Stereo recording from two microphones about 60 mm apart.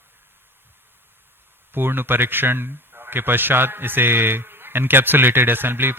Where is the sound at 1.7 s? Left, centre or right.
Right.